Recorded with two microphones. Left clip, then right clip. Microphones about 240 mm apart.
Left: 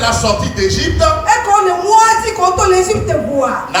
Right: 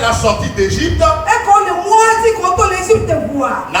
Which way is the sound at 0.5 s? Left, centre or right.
Left.